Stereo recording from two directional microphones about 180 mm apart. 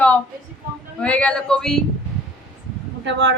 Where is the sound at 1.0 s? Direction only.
5° left (ahead or behind).